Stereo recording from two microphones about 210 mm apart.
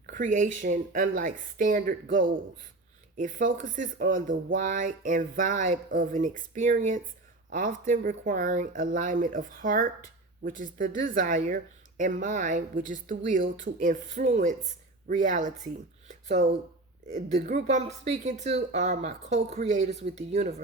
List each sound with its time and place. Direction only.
0.0 s speech: 40° right (ahead or behind)
3.2 s speech: 40° right (ahead or behind)
17.4 s speech: 35° right (ahead or behind)